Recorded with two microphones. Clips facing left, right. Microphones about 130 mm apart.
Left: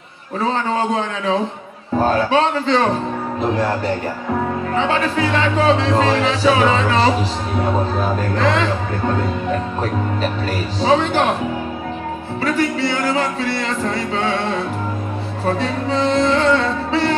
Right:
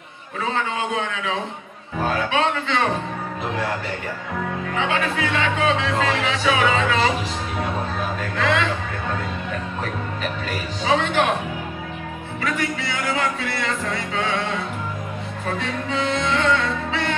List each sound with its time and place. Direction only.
0.4 s speech: 35° left (ahead or behind)
8.2 s speech: 35° left (ahead or behind)
10.8 s speech: 35° left (ahead or behind)
12.4 s speech: 35° left (ahead or behind)